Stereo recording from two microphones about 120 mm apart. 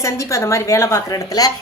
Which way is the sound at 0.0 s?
25° left (ahead or behind).